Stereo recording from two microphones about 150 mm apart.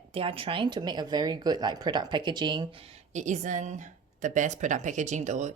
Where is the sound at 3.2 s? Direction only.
55° right (ahead or behind).